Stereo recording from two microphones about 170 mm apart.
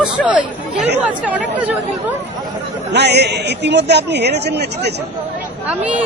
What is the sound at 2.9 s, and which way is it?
A man's voice, 80° right.